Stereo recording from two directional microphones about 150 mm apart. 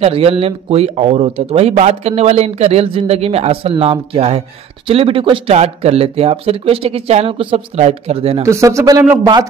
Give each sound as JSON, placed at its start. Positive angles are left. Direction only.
{"t": 0.0, "sound": "speech", "side_deg": -40}
{"t": 8.4, "sound": "a man's voice", "side_deg": -20}